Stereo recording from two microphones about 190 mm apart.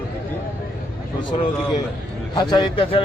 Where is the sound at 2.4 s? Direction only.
20° left (ahead or behind).